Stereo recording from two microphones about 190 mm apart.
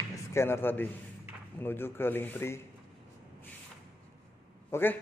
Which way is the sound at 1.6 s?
10° left (ahead or behind).